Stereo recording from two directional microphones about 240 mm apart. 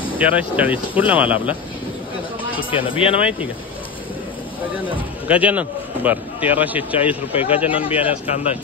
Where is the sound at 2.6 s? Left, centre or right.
Left.